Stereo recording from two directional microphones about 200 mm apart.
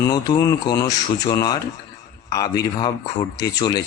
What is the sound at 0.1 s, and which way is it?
A man's voice, 20° left (ahead or behind).